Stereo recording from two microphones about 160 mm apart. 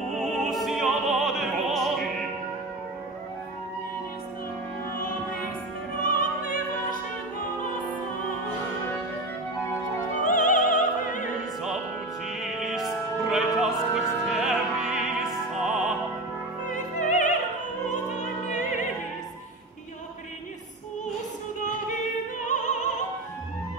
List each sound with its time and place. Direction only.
0.1 s opera: centre (ahead or behind)
5.9 s opera: 60° left (ahead or behind)
10.2 s opera: 55° left (ahead or behind)
12.4 s music: 5° right (ahead or behind)
16.7 s music: 50° left (ahead or behind)
17.8 s opera: 50° left (ahead or behind)
22.5 s opera: 50° left (ahead or behind)